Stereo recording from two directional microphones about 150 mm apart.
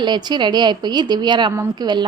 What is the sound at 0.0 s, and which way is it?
A woman's voice, 30° right (ahead or behind).